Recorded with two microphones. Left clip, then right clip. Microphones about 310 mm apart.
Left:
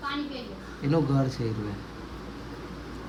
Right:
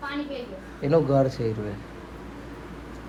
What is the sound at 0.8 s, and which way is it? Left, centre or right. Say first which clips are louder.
Speech: right 6 dB; centre.